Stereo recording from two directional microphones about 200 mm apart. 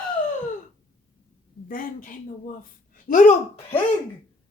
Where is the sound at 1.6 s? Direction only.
45° left (ahead or behind).